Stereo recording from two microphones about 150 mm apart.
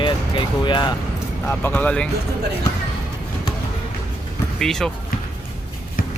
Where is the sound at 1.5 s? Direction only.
10° left (ahead or behind).